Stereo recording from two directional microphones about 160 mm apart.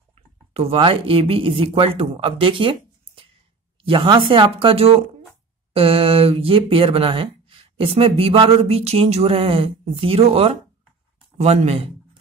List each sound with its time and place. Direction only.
0.5 s speech: 40° right (ahead or behind)